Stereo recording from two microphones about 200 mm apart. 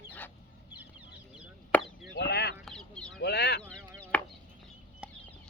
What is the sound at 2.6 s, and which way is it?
Chicken, 5° left (ahead or behind).